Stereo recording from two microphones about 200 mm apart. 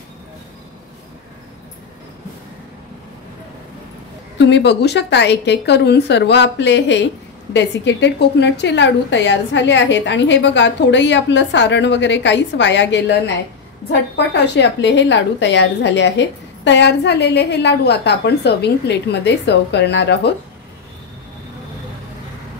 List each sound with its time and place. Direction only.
4.4 s a woman's voice: 60° left (ahead or behind)